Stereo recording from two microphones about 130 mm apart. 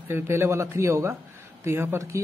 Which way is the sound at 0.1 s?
20° right (ahead or behind).